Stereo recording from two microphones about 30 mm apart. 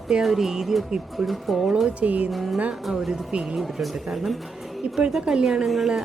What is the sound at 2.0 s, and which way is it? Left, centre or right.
Speech, right.